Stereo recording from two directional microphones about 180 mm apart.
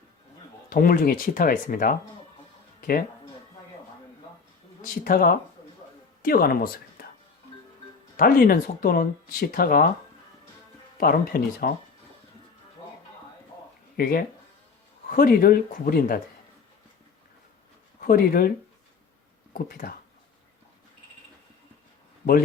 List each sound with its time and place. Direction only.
0.7 s speech: 55° left (ahead or behind)
5.0 s speech: 55° left (ahead or behind)
8.1 s speech: 55° left (ahead or behind)
11.0 s speech: 55° left (ahead or behind)
13.9 s speech: 55° left (ahead or behind)
18.0 s speech: 55° left (ahead or behind)
19.5 s speech: 55° left (ahead or behind)